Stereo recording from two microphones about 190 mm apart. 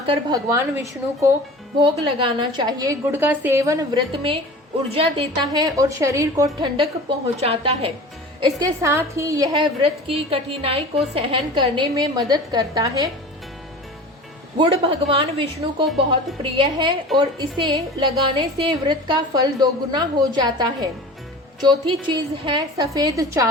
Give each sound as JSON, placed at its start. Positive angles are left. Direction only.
{"t": 0.0, "sound": "a woman's voice", "side_deg": -25}
{"t": 0.4, "sound": "a woman's voice", "side_deg": -15}
{"t": 1.8, "sound": "a woman's voice", "side_deg": -25}
{"t": 4.1, "sound": "a woman's voice", "side_deg": -25}
{"t": 7.3, "sound": "a woman's voice", "side_deg": -35}
{"t": 8.4, "sound": "a woman's voice", "side_deg": -20}
{"t": 14.6, "sound": "a woman's voice", "side_deg": -30}
{"t": 17.1, "sound": "a woman's voice", "side_deg": 0}
{"t": 17.6, "sound": "a woman's voice", "side_deg": -25}